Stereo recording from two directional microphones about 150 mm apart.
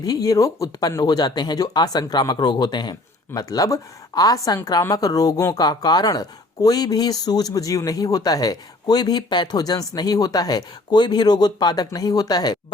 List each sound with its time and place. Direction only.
0.0 s speech: 25° left (ahead or behind)